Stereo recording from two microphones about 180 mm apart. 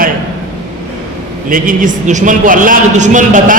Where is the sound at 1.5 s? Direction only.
50° right (ahead or behind).